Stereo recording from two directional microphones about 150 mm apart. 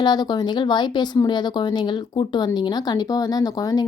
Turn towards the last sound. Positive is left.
turn(degrees=25)  # may be behind; listen again after turning